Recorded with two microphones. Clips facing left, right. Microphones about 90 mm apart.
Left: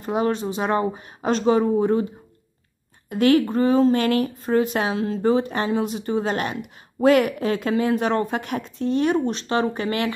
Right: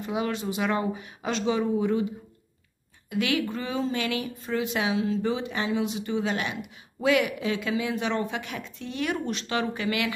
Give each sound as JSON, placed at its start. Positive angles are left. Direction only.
{"t": 0.0, "sound": "speech", "side_deg": 40}
{"t": 3.1, "sound": "speech", "side_deg": 45}